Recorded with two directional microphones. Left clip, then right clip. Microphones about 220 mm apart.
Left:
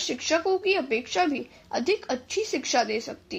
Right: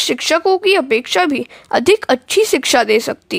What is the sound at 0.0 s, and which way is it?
Speech, 45° right (ahead or behind).